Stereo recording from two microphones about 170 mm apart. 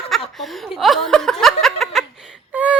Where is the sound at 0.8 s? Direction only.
Centre (ahead or behind).